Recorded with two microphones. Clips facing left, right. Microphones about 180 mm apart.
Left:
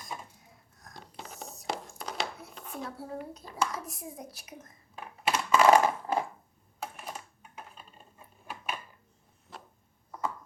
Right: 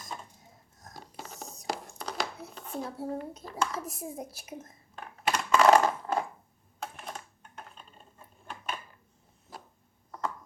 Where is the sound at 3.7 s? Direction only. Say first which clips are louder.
Right 4 dB; 25° right (ahead or behind).